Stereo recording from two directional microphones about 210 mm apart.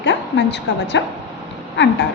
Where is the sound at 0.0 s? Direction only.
55° left (ahead or behind).